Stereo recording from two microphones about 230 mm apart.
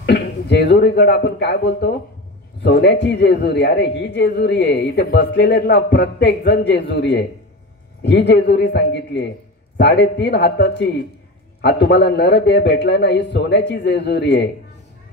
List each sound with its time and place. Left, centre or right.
0.0 s a man's voice: left